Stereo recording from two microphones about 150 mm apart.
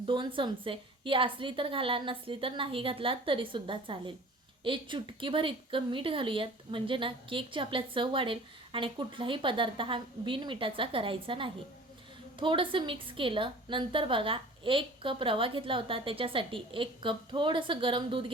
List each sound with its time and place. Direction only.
0.0 s a woman's voice: 35° right (ahead or behind)